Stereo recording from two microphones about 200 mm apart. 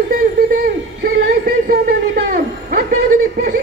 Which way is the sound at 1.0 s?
50° right (ahead or behind).